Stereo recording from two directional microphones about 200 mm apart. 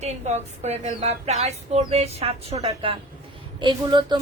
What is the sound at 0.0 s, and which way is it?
Speech, 35° right (ahead or behind).